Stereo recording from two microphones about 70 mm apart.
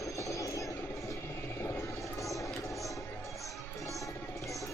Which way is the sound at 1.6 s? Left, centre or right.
Left.